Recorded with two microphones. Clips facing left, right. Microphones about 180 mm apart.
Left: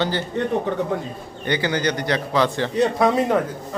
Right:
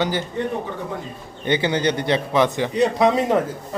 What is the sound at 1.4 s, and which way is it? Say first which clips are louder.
A man's voice: right 2 dB; 20° right (ahead or behind).